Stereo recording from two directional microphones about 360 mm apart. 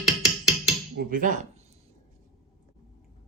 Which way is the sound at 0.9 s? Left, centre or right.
Right.